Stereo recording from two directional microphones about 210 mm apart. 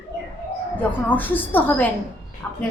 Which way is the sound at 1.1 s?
10° left (ahead or behind).